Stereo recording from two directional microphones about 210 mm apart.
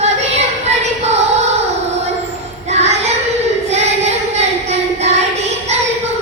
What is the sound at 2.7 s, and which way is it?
Child singing, 30° right (ahead or behind).